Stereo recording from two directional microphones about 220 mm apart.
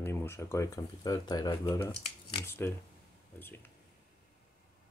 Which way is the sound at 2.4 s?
10° left (ahead or behind).